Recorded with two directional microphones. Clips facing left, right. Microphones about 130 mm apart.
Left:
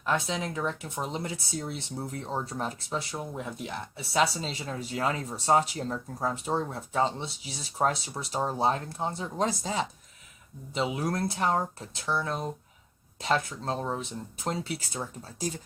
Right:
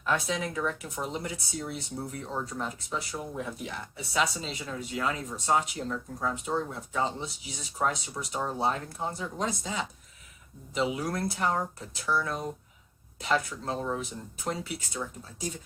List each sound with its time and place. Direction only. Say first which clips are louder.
0.1 s speech: even; 25° left (ahead or behind)